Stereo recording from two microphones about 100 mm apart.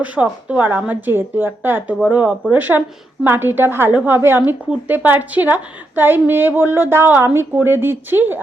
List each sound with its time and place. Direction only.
0.0 s a woman's voice: 15° right (ahead or behind)